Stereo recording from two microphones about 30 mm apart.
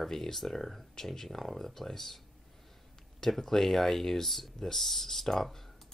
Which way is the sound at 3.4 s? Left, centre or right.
Centre.